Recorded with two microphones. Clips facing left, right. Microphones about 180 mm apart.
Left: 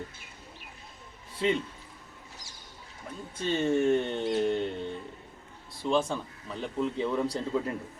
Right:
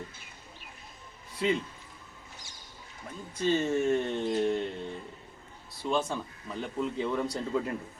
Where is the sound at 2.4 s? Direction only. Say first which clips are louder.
Left 1 dB; 35° left (ahead or behind).